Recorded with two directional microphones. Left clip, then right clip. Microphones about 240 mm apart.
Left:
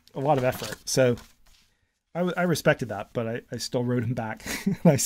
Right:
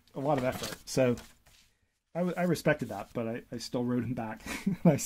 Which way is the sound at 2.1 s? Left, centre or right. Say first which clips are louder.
Left 5 dB; left.